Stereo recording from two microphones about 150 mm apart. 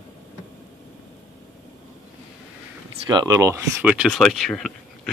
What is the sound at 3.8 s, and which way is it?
Speech, 5° right (ahead or behind).